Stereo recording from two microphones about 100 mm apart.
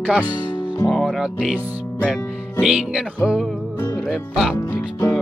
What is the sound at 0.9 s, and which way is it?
Speech, centre (ahead or behind).